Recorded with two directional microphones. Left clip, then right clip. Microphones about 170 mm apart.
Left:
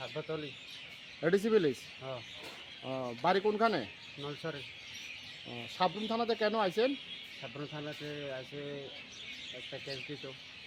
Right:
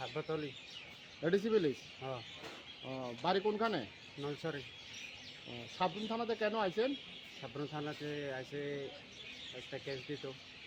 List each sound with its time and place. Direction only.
0.0 s speech: 5° right (ahead or behind)
1.2 s speech: 50° left (ahead or behind)
2.8 s speech: 50° left (ahead or behind)
4.4 s speech: 5° right (ahead or behind)
5.7 s speech: 55° left (ahead or behind)
7.4 s speech: 10° right (ahead or behind)